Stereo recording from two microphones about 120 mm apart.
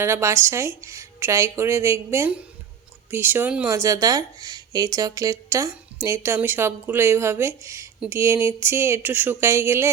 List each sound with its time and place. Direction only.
0.0 s speech: 20° right (ahead or behind)